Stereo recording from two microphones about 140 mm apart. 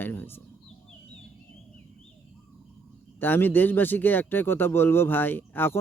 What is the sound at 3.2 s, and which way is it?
Speech, 15° left (ahead or behind).